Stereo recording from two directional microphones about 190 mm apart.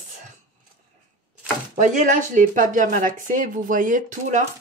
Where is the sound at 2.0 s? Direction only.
40° right (ahead or behind).